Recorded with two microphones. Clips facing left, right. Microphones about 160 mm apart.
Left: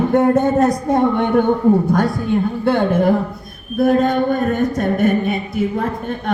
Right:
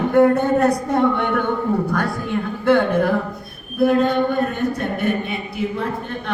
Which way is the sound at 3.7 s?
45° left (ahead or behind).